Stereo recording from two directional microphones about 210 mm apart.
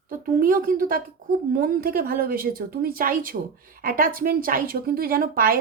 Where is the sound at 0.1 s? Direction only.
40° right (ahead or behind).